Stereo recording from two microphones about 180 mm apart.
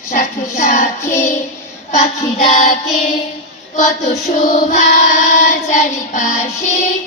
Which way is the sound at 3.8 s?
40° left (ahead or behind).